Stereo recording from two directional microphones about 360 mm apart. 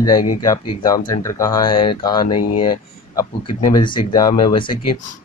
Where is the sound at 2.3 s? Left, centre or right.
Left.